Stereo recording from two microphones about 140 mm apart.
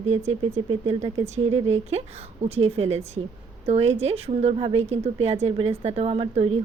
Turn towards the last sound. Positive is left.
turn(degrees=-40)  # may be behind; listen again after turning